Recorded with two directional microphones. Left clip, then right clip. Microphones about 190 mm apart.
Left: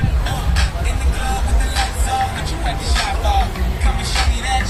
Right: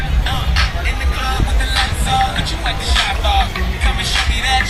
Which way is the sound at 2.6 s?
10° left (ahead or behind).